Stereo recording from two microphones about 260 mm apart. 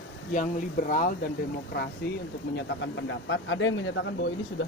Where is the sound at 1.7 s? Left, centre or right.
Left.